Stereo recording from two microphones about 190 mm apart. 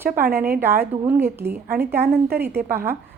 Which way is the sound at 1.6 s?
50° right (ahead or behind).